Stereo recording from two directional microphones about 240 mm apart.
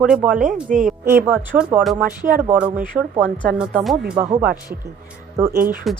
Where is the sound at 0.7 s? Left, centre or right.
Right.